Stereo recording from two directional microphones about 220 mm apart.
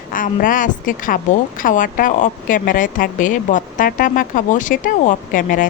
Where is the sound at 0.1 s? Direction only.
40° left (ahead or behind).